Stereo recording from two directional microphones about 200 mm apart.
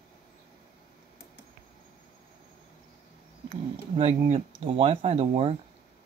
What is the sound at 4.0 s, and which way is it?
Speech, 30° right (ahead or behind).